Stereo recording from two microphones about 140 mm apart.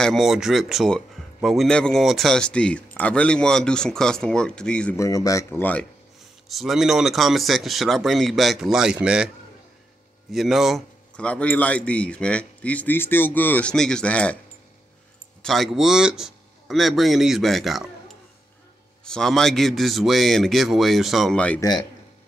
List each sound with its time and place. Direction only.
0.0 s speech: centre (ahead or behind)
4.9 s speech: 25° left (ahead or behind)
6.5 s speech: centre (ahead or behind)
10.3 s speech: centre (ahead or behind)
11.2 s speech: 10° left (ahead or behind)
15.4 s speech: centre (ahead or behind)
19.0 s speech: 5° left (ahead or behind)
21.5 s speech: 30° left (ahead or behind)